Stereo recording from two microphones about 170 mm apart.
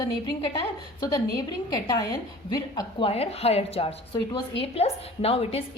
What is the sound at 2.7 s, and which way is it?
A woman's voice, 25° left (ahead or behind).